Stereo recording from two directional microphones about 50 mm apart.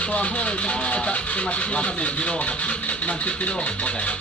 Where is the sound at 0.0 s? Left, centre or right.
Left.